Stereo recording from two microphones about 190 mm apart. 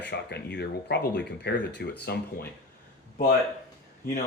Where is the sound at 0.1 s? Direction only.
60° left (ahead or behind).